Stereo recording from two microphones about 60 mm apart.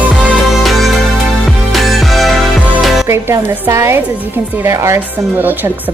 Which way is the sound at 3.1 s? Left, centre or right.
Right.